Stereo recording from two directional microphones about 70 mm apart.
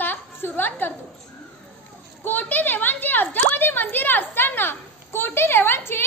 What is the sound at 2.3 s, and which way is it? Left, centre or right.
A woman's voice, left.